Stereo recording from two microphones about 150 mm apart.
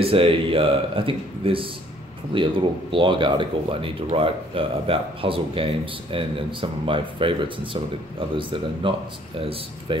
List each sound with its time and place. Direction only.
0.0 s speech: 35° right (ahead or behind)